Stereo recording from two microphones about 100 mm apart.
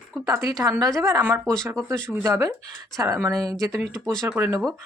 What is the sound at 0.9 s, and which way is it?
Speech, 35° right (ahead or behind).